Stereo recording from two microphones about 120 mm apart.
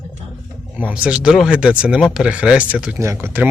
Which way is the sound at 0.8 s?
10° right (ahead or behind).